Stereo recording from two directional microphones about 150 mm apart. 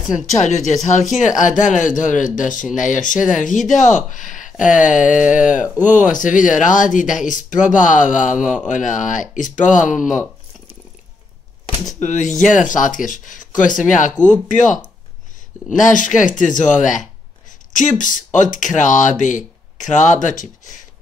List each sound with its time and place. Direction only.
0.0 s speech: 5° right (ahead or behind)
0.8 s speech: 55° left (ahead or behind)
12.0 s speech: 55° left (ahead or behind)
15.8 s speech: 60° left (ahead or behind)